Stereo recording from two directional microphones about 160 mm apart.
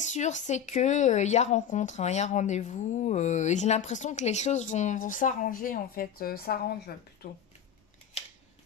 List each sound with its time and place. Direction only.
0.0 s speech: 50° left (ahead or behind); by 6.7 s 70° left (ahead or behind)